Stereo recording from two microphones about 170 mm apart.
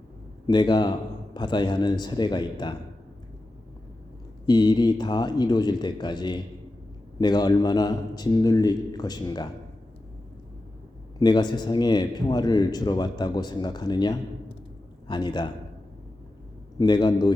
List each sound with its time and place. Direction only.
0.4 s speech: 25° left (ahead or behind)
4.4 s speech: 25° left (ahead or behind)
11.2 s a man's voice: 25° left (ahead or behind)
16.7 s speech: 25° left (ahead or behind)